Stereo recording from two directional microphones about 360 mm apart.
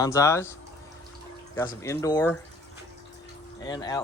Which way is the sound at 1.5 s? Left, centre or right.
Centre.